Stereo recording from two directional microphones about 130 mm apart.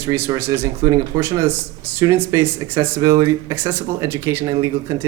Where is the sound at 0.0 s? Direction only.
20° right (ahead or behind).